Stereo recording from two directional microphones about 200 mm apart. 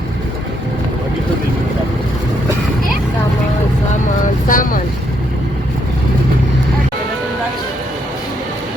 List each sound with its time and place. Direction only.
4.4 s vehicle: 40° left (ahead or behind)